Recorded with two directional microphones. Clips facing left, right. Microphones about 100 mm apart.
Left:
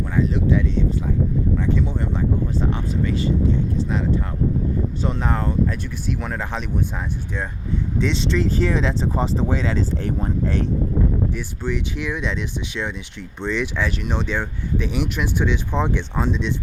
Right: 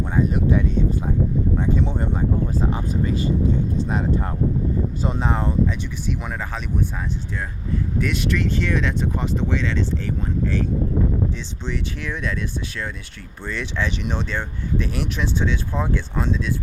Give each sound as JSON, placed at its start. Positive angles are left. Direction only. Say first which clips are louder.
{"t": 0.2, "sound": "speech", "louder": "even", "side_deg": -50}
{"t": 2.6, "sound": "speech", "louder": "even", "side_deg": -35}
{"t": 5.2, "sound": "speech", "louder": "right 1 dB", "side_deg": -5}
{"t": 7.9, "sound": "speech", "louder": "left 3 dB", "side_deg": 25}
{"t": 11.3, "sound": "speech", "louder": "left 3 dB", "side_deg": 10}